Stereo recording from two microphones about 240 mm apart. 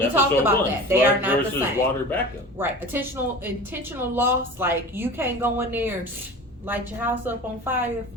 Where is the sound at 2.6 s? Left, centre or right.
Centre.